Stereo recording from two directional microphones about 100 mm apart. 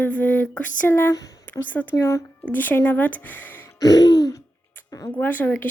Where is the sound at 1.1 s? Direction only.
35° left (ahead or behind).